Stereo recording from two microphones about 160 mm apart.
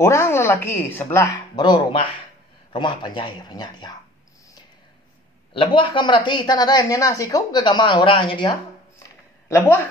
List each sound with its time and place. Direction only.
0.0 s speech: 15° left (ahead or behind)
1.7 s a woman's voice: 30° left (ahead or behind)
5.5 s a woman's voice: 30° left (ahead or behind)
9.5 s speech: 10° left (ahead or behind)